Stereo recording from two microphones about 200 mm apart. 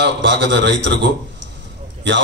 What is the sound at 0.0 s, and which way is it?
A man's voice, 60° right (ahead or behind).